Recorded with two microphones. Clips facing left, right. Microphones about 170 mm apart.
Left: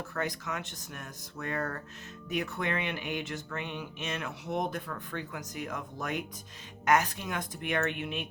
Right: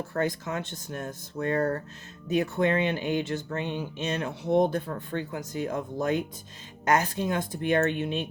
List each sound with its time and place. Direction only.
0.0 s speech: 30° right (ahead or behind)